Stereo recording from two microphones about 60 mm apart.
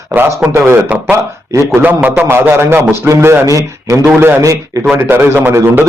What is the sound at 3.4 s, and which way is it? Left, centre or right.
Speech, right.